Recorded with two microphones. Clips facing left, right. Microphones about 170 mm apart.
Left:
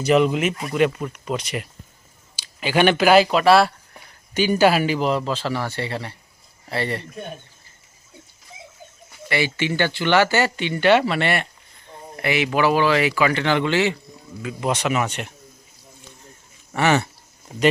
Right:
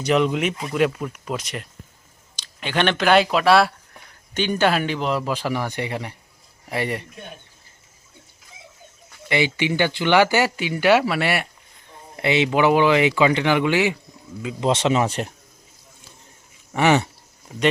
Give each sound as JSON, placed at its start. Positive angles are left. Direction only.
{"t": 0.0, "sound": "speech", "side_deg": 0}
{"t": 5.2, "sound": "speech", "side_deg": -15}
{"t": 9.3, "sound": "speech", "side_deg": -15}
{"t": 12.1, "sound": "speech", "side_deg": -25}
{"t": 14.4, "sound": "speech", "side_deg": -25}
{"t": 16.7, "sound": "speech", "side_deg": -15}